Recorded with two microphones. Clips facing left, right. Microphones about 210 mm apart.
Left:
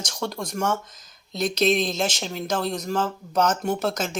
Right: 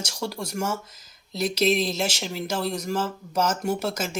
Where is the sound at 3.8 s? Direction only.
10° right (ahead or behind).